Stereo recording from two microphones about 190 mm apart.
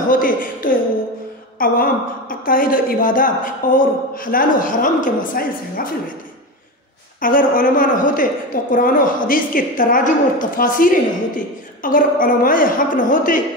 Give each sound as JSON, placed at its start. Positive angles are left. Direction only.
{"t": 0.1, "sound": "a woman's voice", "side_deg": 45}
{"t": 7.2, "sound": "a woman's voice", "side_deg": 45}